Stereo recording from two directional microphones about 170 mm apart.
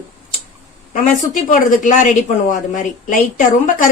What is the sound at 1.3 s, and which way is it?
A woman's voice, 50° left (ahead or behind).